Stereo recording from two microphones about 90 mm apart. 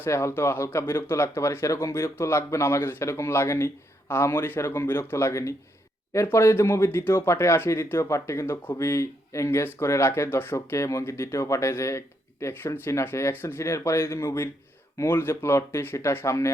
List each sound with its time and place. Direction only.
0.0 s speech: 30° left (ahead or behind)